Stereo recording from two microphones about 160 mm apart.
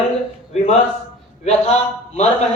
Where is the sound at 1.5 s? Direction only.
45° left (ahead or behind).